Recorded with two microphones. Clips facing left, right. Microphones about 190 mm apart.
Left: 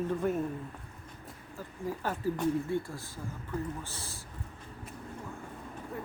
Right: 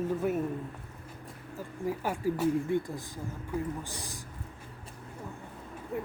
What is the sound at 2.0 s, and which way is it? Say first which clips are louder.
Speech: right 1 dB; 10° right (ahead or behind).